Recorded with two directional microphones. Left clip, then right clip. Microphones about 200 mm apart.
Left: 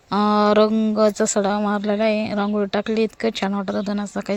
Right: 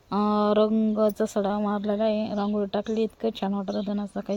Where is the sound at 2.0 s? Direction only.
50° left (ahead or behind).